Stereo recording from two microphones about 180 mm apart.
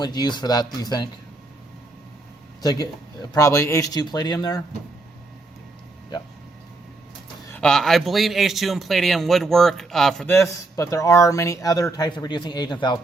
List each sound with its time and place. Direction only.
0.0 s a man's voice: 25° left (ahead or behind)
2.6 s a man's voice: 20° left (ahead or behind)
7.5 s a man's voice: 5° left (ahead or behind)
10.3 s a man's voice: 15° left (ahead or behind)